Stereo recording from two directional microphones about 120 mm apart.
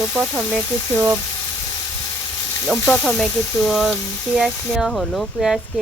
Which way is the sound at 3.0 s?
5° left (ahead or behind).